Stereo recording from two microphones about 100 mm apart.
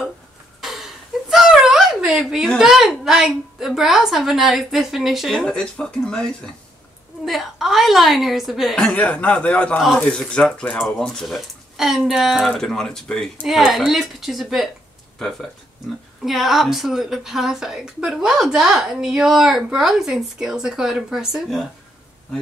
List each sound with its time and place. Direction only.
0.6 s a woman's voice: 5° right (ahead or behind)
8.7 s a man's voice: 10° left (ahead or behind)
16.3 s a woman's voice: centre (ahead or behind)